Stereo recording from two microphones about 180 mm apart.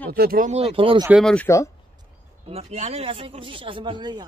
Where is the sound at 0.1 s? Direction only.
55° right (ahead or behind).